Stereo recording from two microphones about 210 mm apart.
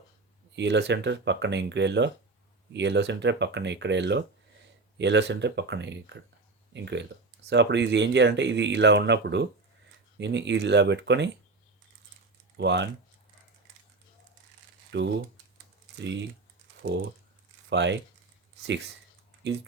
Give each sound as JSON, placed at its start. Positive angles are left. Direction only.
{"t": 0.5, "sound": "speech", "side_deg": -55}
{"t": 12.5, "sound": "speech", "side_deg": -55}
{"t": 14.9, "sound": "speech", "side_deg": -55}
{"t": 17.7, "sound": "speech", "side_deg": -55}